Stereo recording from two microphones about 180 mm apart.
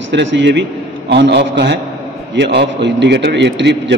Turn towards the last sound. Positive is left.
turn(degrees=-75)  # may be behind; listen again after turning